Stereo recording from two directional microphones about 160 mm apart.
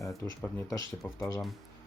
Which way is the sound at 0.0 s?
20° left (ahead or behind).